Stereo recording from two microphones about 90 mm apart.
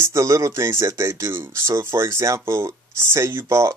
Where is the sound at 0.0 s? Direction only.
30° right (ahead or behind).